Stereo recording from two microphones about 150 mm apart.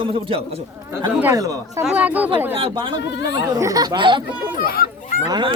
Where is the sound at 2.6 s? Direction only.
35° right (ahead or behind).